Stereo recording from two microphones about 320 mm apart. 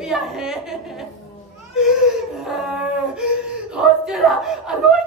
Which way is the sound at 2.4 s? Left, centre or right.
Centre.